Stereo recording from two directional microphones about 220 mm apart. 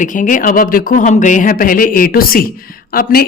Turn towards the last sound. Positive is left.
turn(degrees=40)  # may be behind; listen again after turning